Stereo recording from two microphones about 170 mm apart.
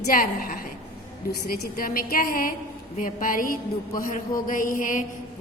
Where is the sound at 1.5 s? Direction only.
60° left (ahead or behind).